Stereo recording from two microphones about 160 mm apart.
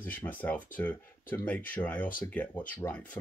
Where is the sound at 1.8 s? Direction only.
25° left (ahead or behind).